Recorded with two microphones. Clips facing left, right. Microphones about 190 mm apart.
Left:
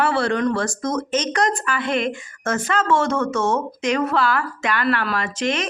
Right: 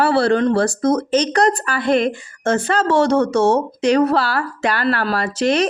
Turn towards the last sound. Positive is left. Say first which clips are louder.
# right 6 dB
turn(degrees=-40)  # may be behind; listen again after turning